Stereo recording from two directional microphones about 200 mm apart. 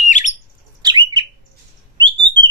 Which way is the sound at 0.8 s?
20° right (ahead or behind).